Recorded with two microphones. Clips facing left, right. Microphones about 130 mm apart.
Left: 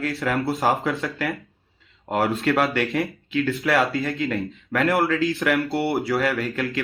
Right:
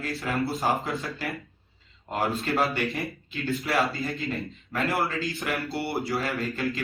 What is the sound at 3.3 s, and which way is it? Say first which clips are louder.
A man's voice: left 6 dB; 65° left (ahead or behind).